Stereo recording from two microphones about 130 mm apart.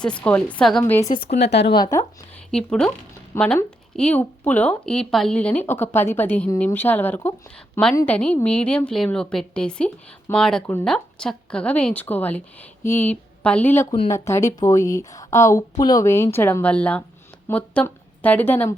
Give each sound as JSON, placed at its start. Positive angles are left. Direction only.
{"t": 0.0, "sound": "speech", "side_deg": 10}
{"t": 0.9, "sound": "a woman's voice", "side_deg": 20}
{"t": 2.5, "sound": "a woman's voice", "side_deg": 5}